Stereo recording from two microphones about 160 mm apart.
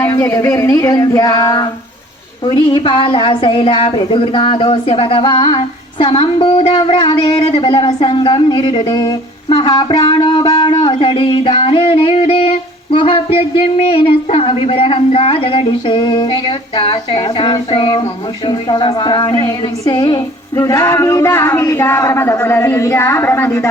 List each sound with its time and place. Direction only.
0.0 s speech: 20° left (ahead or behind)
2.5 s music: 30° left (ahead or behind)
8.0 s speech: 30° left (ahead or behind)
10.6 s music: 30° left (ahead or behind)
18.4 s a woman's voice: 30° left (ahead or behind)